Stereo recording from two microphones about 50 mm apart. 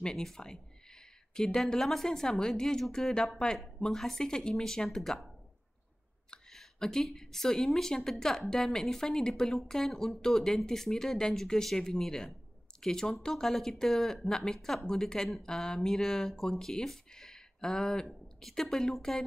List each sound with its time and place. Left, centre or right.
0.0 s a sound: centre
1.6 s speech: centre
6.3 s speech: centre